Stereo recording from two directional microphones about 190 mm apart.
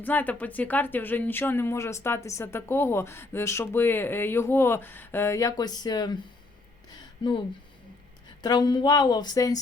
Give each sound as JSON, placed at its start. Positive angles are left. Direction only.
{"t": 0.0, "sound": "speech", "side_deg": 10}